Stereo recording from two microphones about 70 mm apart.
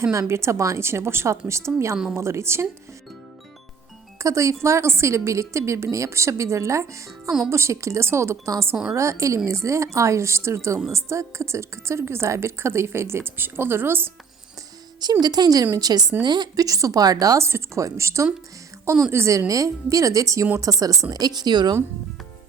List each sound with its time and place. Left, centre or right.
0.0 s a woman's voice: right
4.2 s a woman's voice: right
8.7 s a woman's voice: centre
9.0 s a woman's voice: right
15.2 s speech: right
16.2 s speech: right
16.6 s speech: right
17.4 s a woman's voice: right
21.0 s speech: right